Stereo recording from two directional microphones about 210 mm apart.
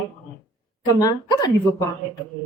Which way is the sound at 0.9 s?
20° left (ahead or behind).